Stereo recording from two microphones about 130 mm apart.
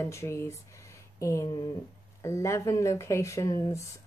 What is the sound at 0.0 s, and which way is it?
Speech, 20° left (ahead or behind).